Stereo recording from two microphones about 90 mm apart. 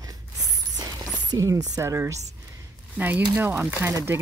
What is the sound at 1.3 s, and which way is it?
Speech, 40° right (ahead or behind).